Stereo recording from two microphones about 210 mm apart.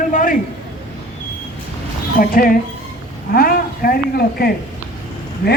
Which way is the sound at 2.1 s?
45° left (ahead or behind).